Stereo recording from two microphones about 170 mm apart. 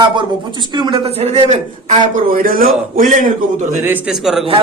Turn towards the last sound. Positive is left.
turn(degrees=0)  # may be behind; listen again after turning